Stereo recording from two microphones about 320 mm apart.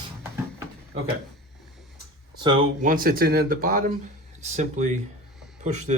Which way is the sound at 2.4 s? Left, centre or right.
Centre.